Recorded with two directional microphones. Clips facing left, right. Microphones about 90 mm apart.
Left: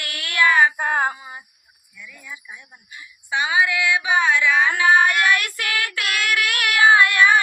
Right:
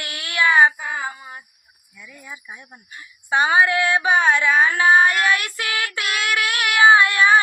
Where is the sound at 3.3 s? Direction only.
45° right (ahead or behind).